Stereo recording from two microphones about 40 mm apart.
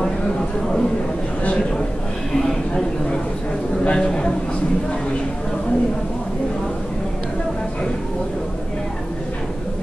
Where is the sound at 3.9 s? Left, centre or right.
Left.